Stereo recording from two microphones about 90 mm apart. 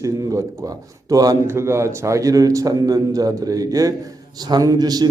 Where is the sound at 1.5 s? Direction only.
30° right (ahead or behind).